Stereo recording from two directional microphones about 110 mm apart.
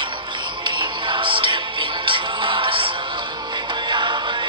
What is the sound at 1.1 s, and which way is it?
Music, 50° right (ahead or behind).